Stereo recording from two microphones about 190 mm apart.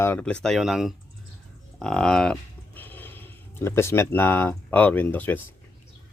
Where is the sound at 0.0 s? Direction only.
10° left (ahead or behind).